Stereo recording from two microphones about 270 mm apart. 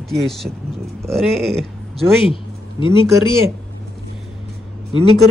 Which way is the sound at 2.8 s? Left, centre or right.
Centre.